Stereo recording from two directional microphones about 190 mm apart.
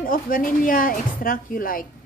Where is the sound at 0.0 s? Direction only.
45° left (ahead or behind).